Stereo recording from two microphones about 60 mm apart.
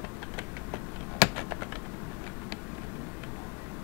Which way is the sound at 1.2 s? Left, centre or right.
Right.